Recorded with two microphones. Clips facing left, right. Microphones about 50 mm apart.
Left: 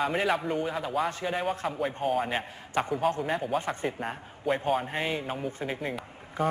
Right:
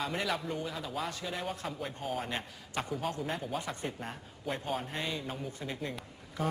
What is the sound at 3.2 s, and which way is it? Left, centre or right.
Speech, centre.